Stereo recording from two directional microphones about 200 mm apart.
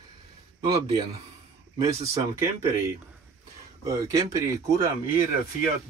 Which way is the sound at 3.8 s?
15° right (ahead or behind).